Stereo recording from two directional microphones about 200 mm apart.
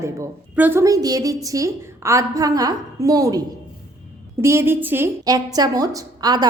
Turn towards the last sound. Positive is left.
turn(degrees=-20)  # may be behind; listen again after turning